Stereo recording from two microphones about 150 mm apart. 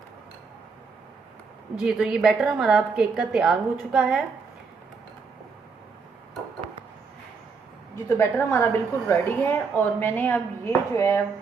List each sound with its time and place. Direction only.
1.7 s a woman's voice: 5° right (ahead or behind)
7.9 s speech: 15° left (ahead or behind)